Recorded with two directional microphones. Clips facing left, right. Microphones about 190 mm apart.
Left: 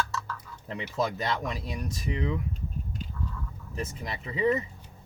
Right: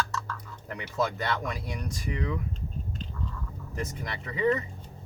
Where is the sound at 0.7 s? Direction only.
20° left (ahead or behind).